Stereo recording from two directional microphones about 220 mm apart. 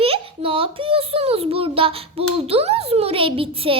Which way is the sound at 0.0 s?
25° right (ahead or behind).